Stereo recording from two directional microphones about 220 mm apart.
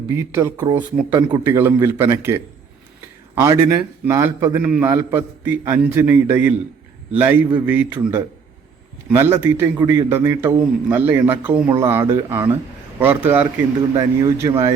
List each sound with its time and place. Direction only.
0.1 s a man's voice: 10° right (ahead or behind)
9.0 s a man's voice: 10° right (ahead or behind)